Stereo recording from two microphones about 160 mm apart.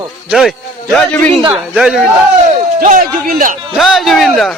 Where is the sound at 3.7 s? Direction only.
Centre (ahead or behind).